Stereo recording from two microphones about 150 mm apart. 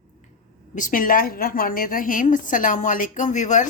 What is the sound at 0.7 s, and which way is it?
A woman's voice, 60° left (ahead or behind).